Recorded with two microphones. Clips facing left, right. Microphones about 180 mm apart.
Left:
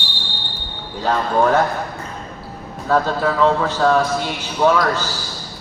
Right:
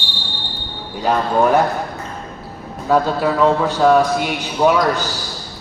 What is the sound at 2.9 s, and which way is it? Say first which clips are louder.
A man's voice: right 2 dB; 10° right (ahead or behind).